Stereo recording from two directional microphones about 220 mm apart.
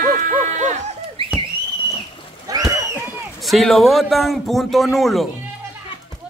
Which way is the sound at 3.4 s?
Centre (ahead or behind).